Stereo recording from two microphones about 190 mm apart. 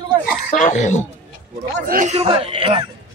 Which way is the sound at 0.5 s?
40° left (ahead or behind).